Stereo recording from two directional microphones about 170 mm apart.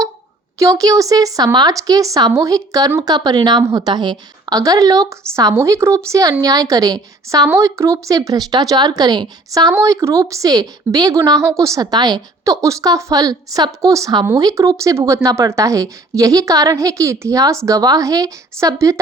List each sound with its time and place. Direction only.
0.6 s a woman's voice: 20° right (ahead or behind)